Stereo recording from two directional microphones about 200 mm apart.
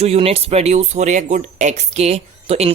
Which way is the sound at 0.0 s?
30° right (ahead or behind).